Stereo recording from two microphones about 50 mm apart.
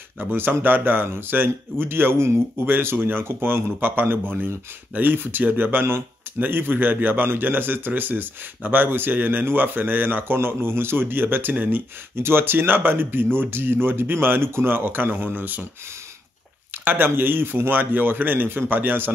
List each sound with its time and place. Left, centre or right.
0.2 s speech: right
2.6 s a man's voice: right
12.2 s speech: right
16.7 s speech: right